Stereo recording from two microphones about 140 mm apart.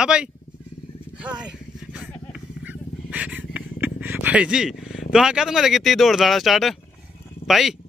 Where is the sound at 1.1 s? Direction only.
5° right (ahead or behind).